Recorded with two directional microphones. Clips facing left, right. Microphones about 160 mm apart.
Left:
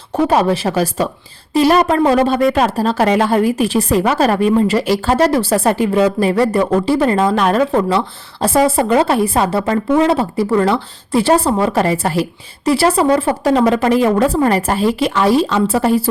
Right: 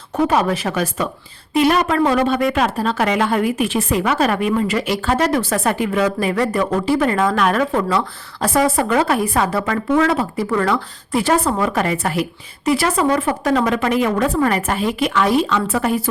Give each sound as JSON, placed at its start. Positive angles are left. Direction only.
{"t": 0.3, "sound": "speech", "side_deg": 30}